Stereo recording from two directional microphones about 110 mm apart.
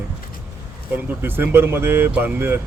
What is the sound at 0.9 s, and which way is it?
Speech, 20° right (ahead or behind).